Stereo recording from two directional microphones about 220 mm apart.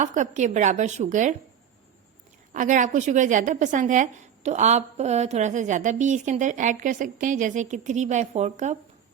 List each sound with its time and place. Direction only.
0.0 s a woman's voice: 35° right (ahead or behind)
2.5 s a woman's voice: 35° right (ahead or behind)